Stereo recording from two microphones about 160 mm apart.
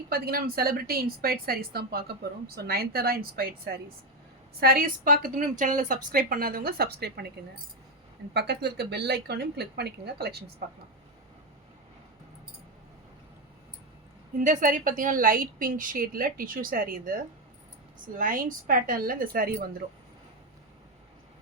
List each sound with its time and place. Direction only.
0.1 s a woman's voice: 70° right (ahead or behind)
5.0 s a woman's voice: 55° right (ahead or behind); by 7.3 s 80° right
8.3 s speech: 90° right
14.4 s a woman's voice: 55° right (ahead or behind)
18.2 s a woman's voice: 60° right (ahead or behind)